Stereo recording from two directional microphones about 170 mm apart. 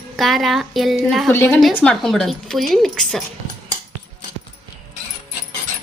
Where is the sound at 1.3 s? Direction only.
10° left (ahead or behind).